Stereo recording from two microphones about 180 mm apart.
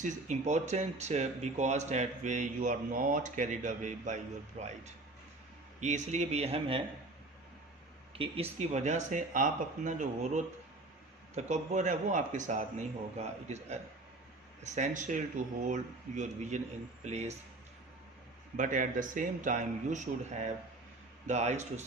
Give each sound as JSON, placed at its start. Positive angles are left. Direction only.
{"t": 0.0, "sound": "speech", "side_deg": -40}
{"t": 8.2, "sound": "speech", "side_deg": -35}
{"t": 18.5, "sound": "speech", "side_deg": -45}